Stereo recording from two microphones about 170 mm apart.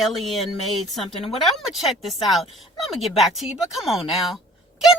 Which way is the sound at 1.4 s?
Centre (ahead or behind).